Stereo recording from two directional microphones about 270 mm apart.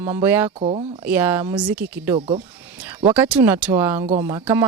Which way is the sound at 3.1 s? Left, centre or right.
Centre.